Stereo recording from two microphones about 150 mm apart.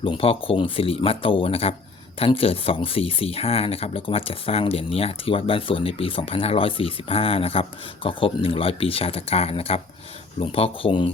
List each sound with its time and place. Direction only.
0.0 s speech: 35° left (ahead or behind)